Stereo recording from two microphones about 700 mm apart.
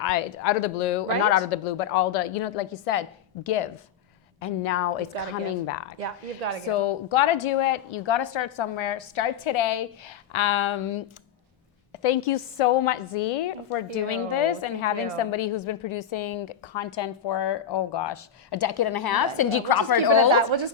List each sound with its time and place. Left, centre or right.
0.0 s a woman's voice: left
5.1 s speech: right
5.5 s speech: left
6.0 s a woman's voice: right
6.7 s a woman's voice: left
20.3 s a woman's voice: right